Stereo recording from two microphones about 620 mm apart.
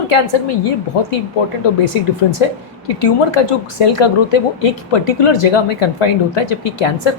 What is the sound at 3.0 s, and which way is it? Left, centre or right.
A woman's voice, left.